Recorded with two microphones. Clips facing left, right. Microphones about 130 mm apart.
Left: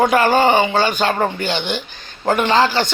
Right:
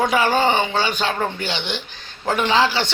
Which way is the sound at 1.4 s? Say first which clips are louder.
Left 5 dB; 50° left (ahead or behind).